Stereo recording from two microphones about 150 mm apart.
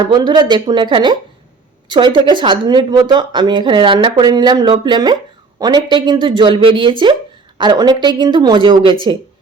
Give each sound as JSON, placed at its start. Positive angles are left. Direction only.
{"t": 0.0, "sound": "a woman's voice", "side_deg": -25}